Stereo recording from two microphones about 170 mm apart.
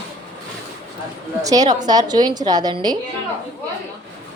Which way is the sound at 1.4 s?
20° right (ahead or behind).